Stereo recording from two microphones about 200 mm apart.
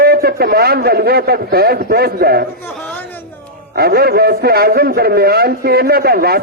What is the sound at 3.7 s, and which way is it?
A man's voice, 50° right (ahead or behind).